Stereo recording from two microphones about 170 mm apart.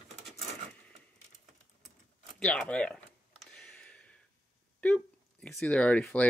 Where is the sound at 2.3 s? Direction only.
5° left (ahead or behind).